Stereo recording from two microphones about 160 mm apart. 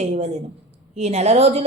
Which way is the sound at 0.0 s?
45° right (ahead or behind).